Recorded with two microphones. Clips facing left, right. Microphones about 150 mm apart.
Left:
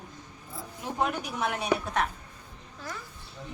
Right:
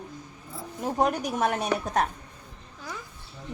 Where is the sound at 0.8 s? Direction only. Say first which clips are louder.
Right 5 dB; 45° right (ahead or behind).